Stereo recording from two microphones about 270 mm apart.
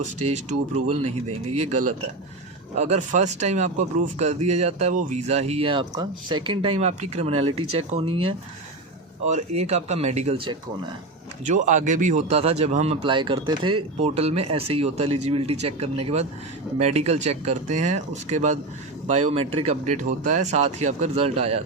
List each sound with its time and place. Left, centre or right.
1.5 s speech: right